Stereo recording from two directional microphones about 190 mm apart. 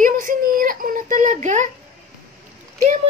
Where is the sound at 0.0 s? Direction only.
45° right (ahead or behind).